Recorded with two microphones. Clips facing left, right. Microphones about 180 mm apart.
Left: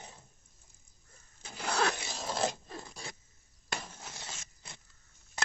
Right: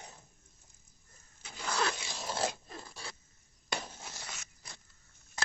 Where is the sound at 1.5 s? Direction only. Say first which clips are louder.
Left 3 dB; 55° left (ahead or behind).